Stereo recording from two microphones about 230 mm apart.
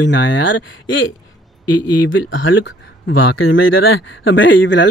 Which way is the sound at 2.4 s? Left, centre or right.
Left.